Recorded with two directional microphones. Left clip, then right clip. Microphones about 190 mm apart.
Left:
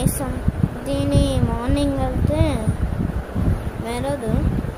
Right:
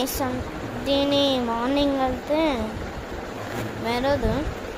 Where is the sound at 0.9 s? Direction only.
20° left (ahead or behind).